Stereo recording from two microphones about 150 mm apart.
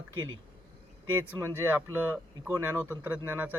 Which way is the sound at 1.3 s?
15° right (ahead or behind).